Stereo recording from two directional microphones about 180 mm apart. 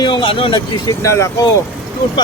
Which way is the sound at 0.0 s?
25° left (ahead or behind).